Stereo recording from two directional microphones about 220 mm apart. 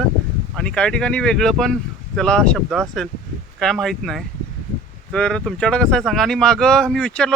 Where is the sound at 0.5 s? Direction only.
5° left (ahead or behind).